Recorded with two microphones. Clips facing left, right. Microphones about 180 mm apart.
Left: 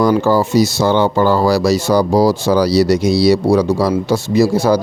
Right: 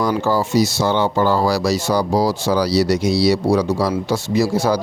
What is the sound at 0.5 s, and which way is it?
Speech, 45° left (ahead or behind).